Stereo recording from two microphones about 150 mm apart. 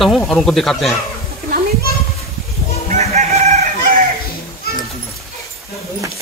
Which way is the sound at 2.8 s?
50° right (ahead or behind).